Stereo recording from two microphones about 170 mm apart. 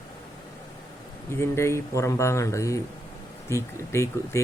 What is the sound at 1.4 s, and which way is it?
A man's voice, 15° left (ahead or behind).